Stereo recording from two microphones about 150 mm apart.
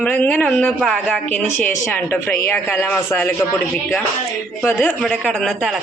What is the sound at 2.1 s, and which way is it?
A man's voice, 15° left (ahead or behind).